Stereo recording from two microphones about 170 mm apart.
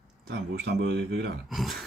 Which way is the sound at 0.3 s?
70° right (ahead or behind).